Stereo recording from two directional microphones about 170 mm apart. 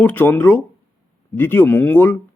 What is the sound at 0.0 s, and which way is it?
Speech, 10° left (ahead or behind).